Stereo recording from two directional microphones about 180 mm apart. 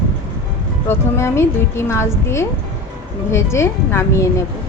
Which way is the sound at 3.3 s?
15° left (ahead or behind).